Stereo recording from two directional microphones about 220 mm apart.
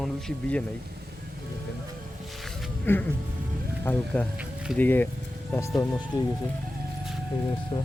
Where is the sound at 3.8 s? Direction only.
10° left (ahead or behind).